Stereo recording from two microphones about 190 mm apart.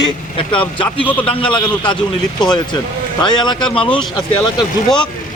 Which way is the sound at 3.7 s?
25° left (ahead or behind).